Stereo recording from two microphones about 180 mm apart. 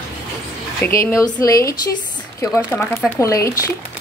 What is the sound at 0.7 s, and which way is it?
A woman's voice, 10° left (ahead or behind).